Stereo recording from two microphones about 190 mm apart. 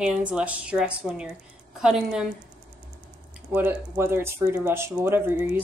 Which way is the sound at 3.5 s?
10° right (ahead or behind).